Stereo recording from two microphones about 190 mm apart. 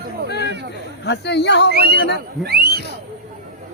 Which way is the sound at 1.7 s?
55° right (ahead or behind).